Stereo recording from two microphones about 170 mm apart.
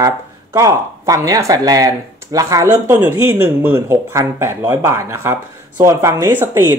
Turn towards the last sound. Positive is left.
turn(degrees=-10)  # may be behind; listen again after turning